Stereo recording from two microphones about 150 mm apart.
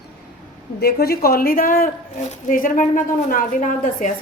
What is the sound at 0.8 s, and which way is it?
A woman's voice, 90° left.